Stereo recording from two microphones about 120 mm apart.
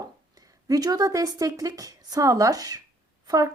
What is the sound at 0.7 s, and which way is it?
Speech, 30° right (ahead or behind).